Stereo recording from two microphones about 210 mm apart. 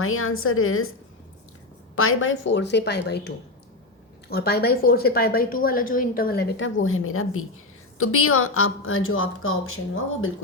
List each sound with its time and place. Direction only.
0.0 s speech: 80° left
2.0 s a woman's voice: 75° left (ahead or behind); by 6.4 s 45° left (ahead or behind)
6.6 s speech: 70° left (ahead or behind)